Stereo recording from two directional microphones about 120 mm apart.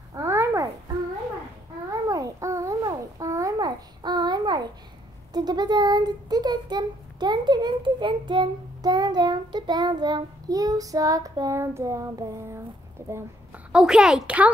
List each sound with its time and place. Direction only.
0.1 s babbling: 25° right (ahead or behind)
2.0 s babbling: 30° right (ahead or behind)
5.3 s a child's voice: 35° right (ahead or behind)
13.7 s a woman's voice: 5° right (ahead or behind)